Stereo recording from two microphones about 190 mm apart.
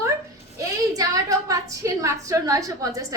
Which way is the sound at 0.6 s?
20° right (ahead or behind).